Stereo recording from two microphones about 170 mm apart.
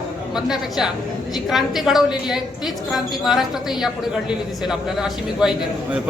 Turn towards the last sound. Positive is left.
turn(degrees=-5)  # may be behind; listen again after turning